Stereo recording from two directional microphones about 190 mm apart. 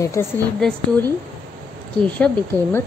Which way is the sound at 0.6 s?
5° left (ahead or behind).